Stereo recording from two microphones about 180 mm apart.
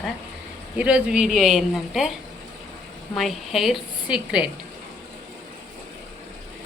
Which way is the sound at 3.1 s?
Centre (ahead or behind).